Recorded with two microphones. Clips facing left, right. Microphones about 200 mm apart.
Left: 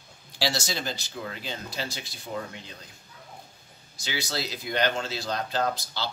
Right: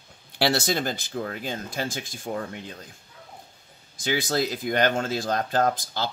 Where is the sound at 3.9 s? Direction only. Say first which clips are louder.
Right 7 dB; 50° right (ahead or behind).